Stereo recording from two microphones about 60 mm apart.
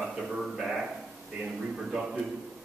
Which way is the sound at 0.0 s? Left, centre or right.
Centre.